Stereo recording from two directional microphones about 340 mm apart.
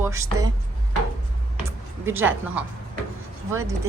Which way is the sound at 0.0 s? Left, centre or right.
Centre.